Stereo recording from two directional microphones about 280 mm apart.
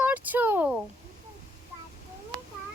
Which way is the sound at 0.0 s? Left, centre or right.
Centre.